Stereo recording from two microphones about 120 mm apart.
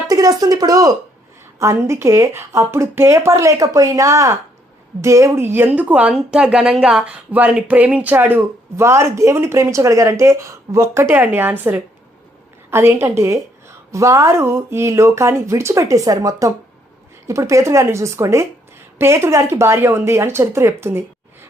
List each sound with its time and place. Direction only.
0.1 s a woman's voice: 30° right (ahead or behind)